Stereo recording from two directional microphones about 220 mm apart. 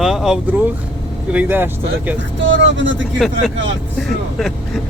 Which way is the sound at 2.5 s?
55° right (ahead or behind).